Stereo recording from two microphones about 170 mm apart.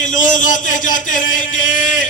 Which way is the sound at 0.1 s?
50° left (ahead or behind).